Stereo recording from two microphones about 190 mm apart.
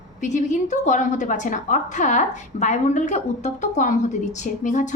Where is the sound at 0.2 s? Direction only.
40° left (ahead or behind).